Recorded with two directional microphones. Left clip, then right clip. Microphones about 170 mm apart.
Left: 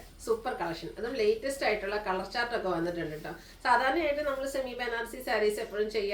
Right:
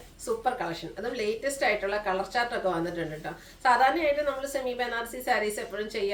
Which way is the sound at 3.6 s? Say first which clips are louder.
Right 4 dB; 15° right (ahead or behind).